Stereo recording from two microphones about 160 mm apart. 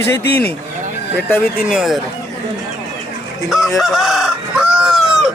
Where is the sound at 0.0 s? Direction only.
10° left (ahead or behind).